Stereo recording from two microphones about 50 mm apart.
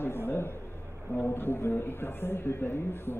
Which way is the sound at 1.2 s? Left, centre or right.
Left.